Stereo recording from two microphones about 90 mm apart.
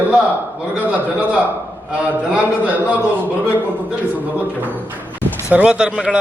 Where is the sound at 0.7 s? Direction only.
15° right (ahead or behind).